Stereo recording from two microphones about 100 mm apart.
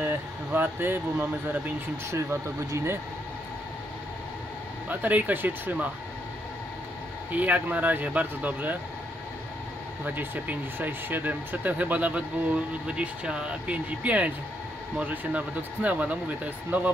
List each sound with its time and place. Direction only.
0.0 s speech: 20° right (ahead or behind)
2.7 s speech: 25° right (ahead or behind)
4.8 s speech: 15° right (ahead or behind)
7.3 s speech: 15° right (ahead or behind)
10.0 s speech: 20° right (ahead or behind)